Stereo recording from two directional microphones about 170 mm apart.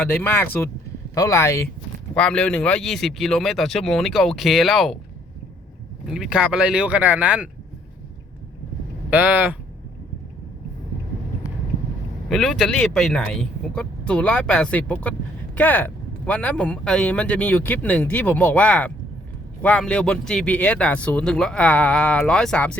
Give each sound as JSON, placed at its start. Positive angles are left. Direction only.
{"t": 0.0, "sound": "speech", "side_deg": 10}
{"t": 2.1, "sound": "a man's voice", "side_deg": 5}
{"t": 6.1, "sound": "a man's voice", "side_deg": -5}
{"t": 9.0, "sound": "speech", "side_deg": -10}
{"t": 12.3, "sound": "a man's voice", "side_deg": 0}